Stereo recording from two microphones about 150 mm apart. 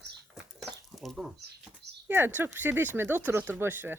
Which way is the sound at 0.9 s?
Centre (ahead or behind).